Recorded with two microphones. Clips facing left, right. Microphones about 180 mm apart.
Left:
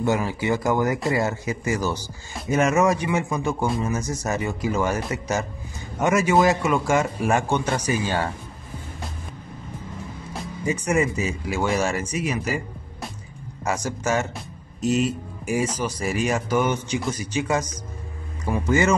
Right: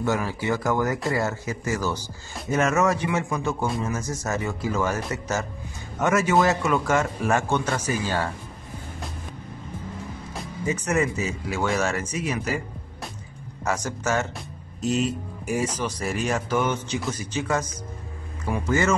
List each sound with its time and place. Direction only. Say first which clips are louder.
0.0 s speech: left 2 dB; 20° left (ahead or behind)
10.7 s speech: left 2 dB; 10° left (ahead or behind)
13.7 s speech: left 1 dB; 10° left (ahead or behind)